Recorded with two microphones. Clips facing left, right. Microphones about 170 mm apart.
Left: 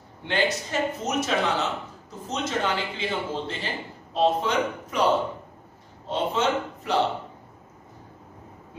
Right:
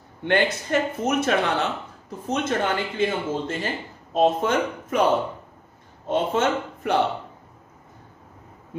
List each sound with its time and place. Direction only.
0.2 s speech: 55° right (ahead or behind)
6.0 s speech: 55° right (ahead or behind)